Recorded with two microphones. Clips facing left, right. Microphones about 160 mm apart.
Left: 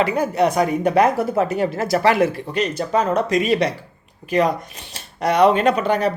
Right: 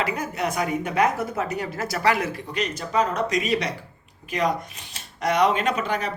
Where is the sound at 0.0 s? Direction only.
35° left (ahead or behind).